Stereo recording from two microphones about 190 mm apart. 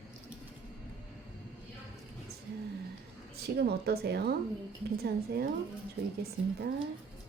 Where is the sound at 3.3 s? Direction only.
55° right (ahead or behind).